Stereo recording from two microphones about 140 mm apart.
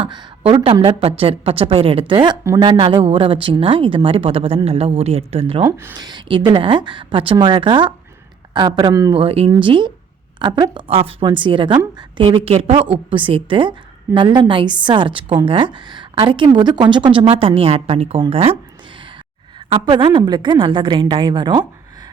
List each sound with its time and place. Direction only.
0.0 s a woman's voice: 30° right (ahead or behind)
2.4 s speech: 20° right (ahead or behind)
2.6 s a woman's voice: 35° right (ahead or behind)
5.6 s speech: 20° right (ahead or behind)
6.0 s a woman's voice: 30° right (ahead or behind)
9.2 s a woman's voice: 40° right (ahead or behind)
19.5 s a woman's voice: 35° right (ahead or behind)